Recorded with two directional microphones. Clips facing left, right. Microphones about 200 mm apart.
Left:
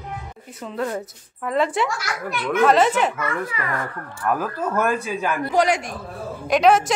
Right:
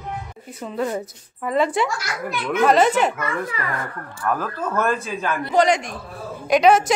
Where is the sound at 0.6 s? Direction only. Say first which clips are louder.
Right 2 dB; 5° right (ahead or behind).